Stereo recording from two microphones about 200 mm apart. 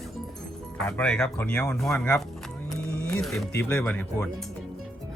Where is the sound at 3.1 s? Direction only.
5° left (ahead or behind).